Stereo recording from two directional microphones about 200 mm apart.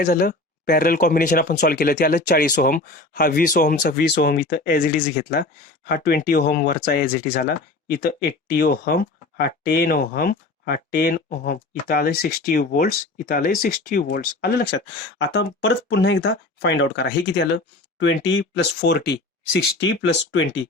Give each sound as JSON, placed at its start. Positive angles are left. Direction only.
{"t": 0.0, "sound": "speech", "side_deg": 50}
{"t": 15.2, "sound": "speech", "side_deg": 60}